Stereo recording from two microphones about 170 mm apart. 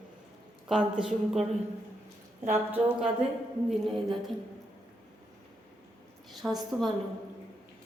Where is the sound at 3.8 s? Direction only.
Centre (ahead or behind).